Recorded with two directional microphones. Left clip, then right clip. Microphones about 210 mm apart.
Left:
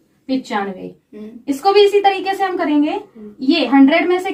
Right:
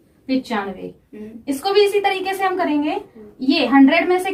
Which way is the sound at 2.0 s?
15° right (ahead or behind).